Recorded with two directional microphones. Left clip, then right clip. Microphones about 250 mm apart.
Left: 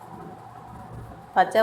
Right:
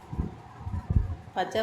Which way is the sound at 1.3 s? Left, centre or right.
Centre.